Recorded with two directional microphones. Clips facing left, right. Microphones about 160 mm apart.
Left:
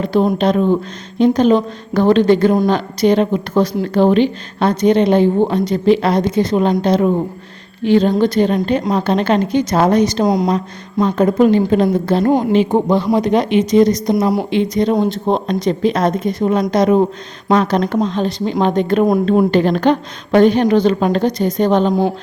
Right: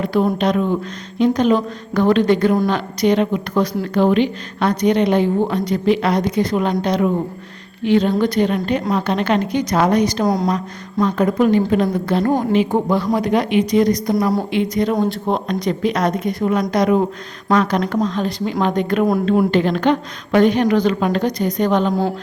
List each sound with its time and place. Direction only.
0.0 s a woman's voice: 25° left (ahead or behind)
10.2 s a woman's voice: 15° left (ahead or behind)
11.0 s a woman's voice: 30° left (ahead or behind)
19.2 s a woman's voice: 35° left (ahead or behind)